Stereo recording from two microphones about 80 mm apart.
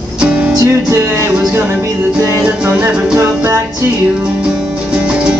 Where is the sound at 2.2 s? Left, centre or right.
Centre.